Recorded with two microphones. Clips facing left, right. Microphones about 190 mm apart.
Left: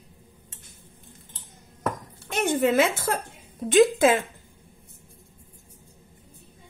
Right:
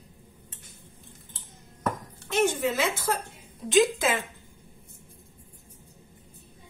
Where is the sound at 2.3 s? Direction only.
55° left (ahead or behind).